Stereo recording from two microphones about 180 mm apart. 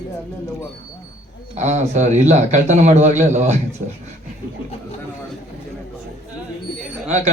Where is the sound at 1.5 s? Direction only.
40° right (ahead or behind).